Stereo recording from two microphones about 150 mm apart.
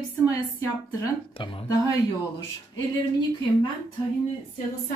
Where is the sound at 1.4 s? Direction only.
35° left (ahead or behind).